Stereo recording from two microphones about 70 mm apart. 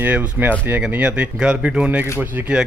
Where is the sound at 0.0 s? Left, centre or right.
Right.